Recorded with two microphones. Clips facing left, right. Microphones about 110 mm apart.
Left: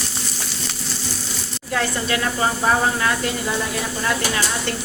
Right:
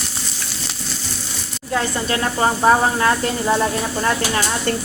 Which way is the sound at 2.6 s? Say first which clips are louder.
Right 5 dB; 25° right (ahead or behind).